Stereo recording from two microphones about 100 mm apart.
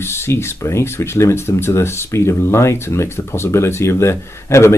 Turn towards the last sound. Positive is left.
turn(degrees=25)  # may be behind; listen again after turning